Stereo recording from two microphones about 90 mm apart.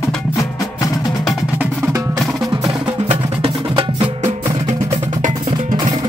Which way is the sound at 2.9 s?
90° right.